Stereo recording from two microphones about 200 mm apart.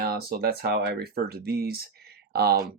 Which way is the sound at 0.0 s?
50° right (ahead or behind).